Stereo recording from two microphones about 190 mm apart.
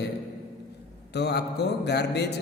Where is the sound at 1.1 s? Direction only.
60° left (ahead or behind).